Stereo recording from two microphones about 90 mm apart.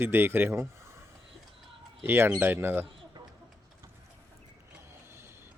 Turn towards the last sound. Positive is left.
turn(degrees=-25)  # may be behind; listen again after turning